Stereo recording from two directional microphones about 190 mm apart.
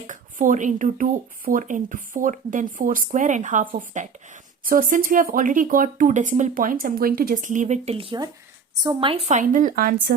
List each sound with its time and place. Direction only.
0.1 s a woman's voice: 45° right (ahead or behind)